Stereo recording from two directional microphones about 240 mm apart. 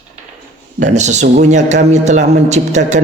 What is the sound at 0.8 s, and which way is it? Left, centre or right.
A man's voice, right.